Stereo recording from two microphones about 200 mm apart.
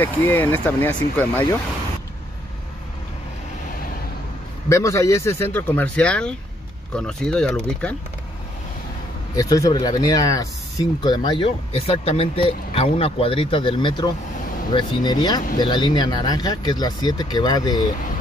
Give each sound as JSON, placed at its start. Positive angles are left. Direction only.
{"t": 0.0, "sound": "speech", "side_deg": 10}
{"t": 4.6, "sound": "speech", "side_deg": 15}
{"t": 9.3, "sound": "speech", "side_deg": 15}